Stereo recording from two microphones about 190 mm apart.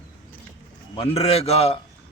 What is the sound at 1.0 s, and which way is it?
Speech, 30° left (ahead or behind).